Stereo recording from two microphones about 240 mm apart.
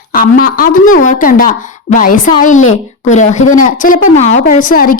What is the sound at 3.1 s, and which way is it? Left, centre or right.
Speech, left.